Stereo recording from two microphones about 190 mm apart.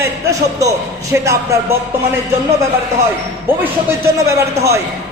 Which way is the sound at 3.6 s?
15° right (ahead or behind).